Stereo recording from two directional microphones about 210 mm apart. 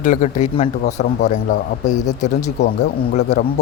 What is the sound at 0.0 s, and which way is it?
Speech, 35° left (ahead or behind).